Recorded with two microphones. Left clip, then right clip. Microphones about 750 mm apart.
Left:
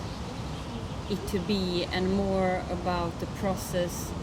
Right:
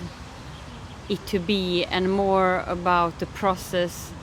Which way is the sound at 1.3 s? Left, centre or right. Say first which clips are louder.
Right 6 dB; right.